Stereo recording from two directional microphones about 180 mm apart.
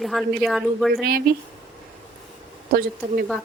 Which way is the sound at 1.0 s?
55° right (ahead or behind).